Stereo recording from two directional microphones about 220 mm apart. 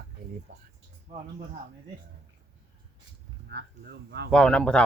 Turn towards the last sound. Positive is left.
turn(degrees=5)  # may be behind; listen again after turning